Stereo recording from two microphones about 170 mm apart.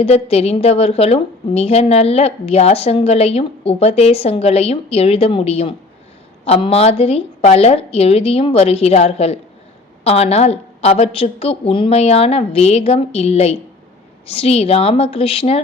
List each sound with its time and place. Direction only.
0.0 s a woman's voice: 35° left (ahead or behind)